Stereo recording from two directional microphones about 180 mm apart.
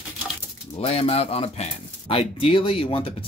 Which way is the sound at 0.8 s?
35° left (ahead or behind).